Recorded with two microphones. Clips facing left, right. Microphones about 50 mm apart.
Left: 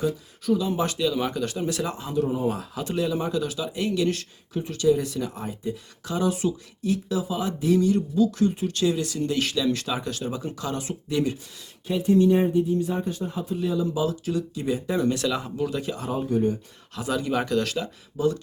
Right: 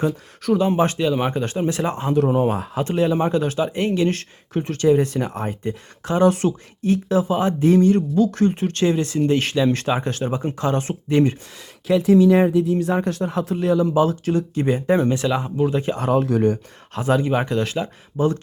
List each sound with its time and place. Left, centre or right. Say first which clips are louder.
0.4 s speech: right 5 dB; right
0.8 s speech: right 5 dB; right
2.5 s speech: right 6 dB; right
11.9 s speech: right 5 dB; right
15.0 s speech: right 4 dB; right
16.0 s speech: right 6 dB; right
16.9 s speech: right 6 dB; right